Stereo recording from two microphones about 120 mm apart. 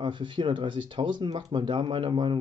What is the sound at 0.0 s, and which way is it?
Speech, 40° right (ahead or behind).